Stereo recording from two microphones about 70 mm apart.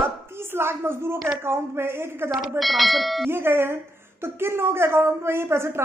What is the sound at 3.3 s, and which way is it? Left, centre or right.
Speech, right.